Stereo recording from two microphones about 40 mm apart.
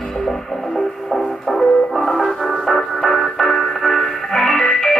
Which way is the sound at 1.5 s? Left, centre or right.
Centre.